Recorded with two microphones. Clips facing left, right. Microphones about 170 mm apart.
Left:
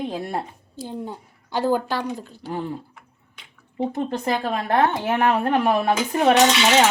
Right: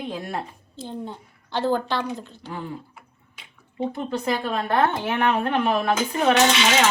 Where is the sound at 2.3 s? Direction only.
40° left (ahead or behind).